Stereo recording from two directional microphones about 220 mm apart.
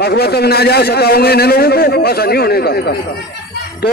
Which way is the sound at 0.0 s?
45° left (ahead or behind).